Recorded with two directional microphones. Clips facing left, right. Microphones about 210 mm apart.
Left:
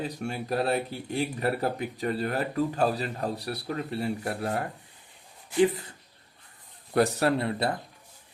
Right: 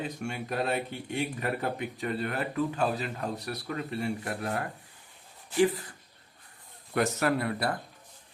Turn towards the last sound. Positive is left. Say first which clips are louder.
# left 2 dB
turn(degrees=25)  # may be behind; listen again after turning